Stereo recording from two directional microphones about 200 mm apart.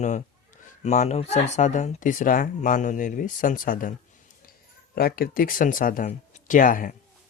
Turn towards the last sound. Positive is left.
turn(degrees=40)  # may be behind; listen again after turning